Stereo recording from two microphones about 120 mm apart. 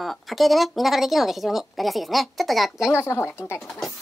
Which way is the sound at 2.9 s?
20° left (ahead or behind).